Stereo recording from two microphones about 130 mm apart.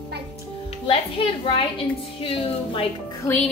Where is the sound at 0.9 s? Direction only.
45° left (ahead or behind).